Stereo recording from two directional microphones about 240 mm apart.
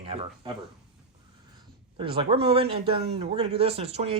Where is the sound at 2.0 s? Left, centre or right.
Right.